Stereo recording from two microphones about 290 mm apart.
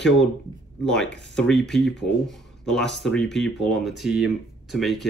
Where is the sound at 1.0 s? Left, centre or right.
Left.